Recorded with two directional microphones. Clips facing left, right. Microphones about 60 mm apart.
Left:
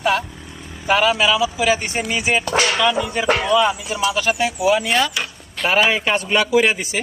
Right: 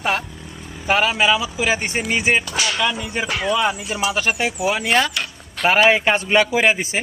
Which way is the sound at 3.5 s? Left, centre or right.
Right.